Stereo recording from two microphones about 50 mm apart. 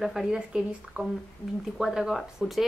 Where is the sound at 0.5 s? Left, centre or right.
Centre.